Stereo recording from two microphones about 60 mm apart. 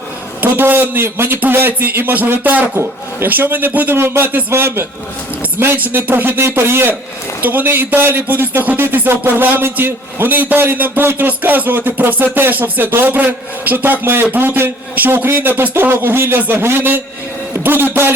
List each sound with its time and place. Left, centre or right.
0.4 s speech: right